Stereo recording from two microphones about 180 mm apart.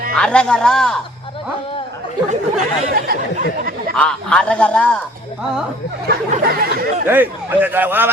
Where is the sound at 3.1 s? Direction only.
55° right (ahead or behind).